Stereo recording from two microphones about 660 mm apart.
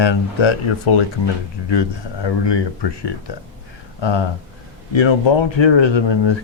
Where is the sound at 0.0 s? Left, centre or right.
Left.